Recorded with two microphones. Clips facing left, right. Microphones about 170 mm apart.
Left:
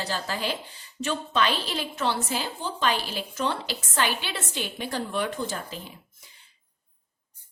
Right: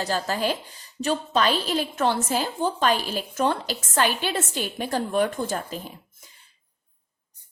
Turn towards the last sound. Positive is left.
turn(degrees=-45)  # may be behind; listen again after turning